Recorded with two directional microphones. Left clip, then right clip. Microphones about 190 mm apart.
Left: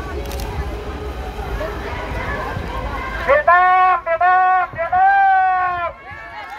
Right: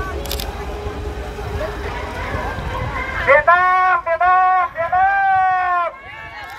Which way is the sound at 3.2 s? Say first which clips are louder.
Even; 40° right (ahead or behind).